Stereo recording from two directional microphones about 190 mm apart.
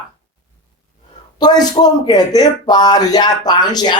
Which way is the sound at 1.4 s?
20° left (ahead or behind).